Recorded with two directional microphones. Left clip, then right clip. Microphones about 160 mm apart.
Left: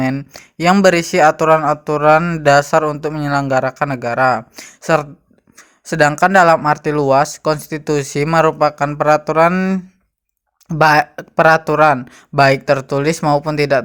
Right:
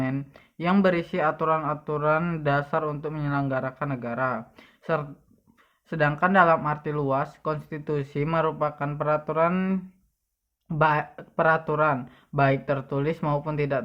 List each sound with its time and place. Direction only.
0.0 s speech: 50° left (ahead or behind)
9.5 s speech: 35° left (ahead or behind)
10.8 s speech: 50° left (ahead or behind)